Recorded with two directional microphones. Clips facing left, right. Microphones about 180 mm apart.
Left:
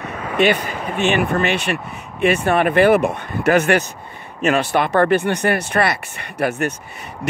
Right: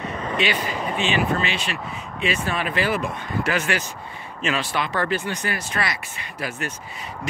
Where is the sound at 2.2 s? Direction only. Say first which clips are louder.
Left 9 dB; 60° left (ahead or behind).